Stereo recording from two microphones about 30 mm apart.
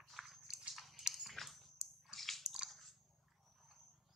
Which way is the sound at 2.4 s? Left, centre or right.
Right.